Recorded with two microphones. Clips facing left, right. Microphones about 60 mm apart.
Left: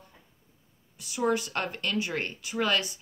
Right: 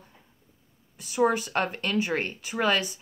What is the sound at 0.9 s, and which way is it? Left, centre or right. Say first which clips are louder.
Speech: right 4 dB; right.